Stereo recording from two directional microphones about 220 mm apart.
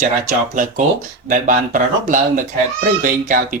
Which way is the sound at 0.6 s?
35° right (ahead or behind).